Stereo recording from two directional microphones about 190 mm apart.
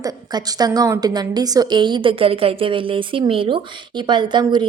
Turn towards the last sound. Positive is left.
turn(degrees=-25)  # may be behind; listen again after turning